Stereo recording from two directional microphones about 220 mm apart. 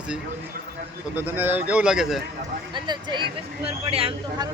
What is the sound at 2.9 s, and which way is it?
Speech, 20° right (ahead or behind).